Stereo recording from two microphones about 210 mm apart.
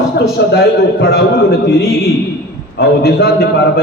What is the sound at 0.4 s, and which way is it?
A man's voice, 55° left (ahead or behind).